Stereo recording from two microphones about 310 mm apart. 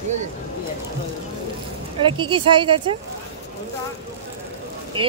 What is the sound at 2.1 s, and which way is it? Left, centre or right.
Speech, centre.